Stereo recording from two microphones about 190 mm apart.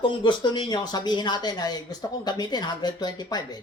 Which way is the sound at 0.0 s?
25° left (ahead or behind).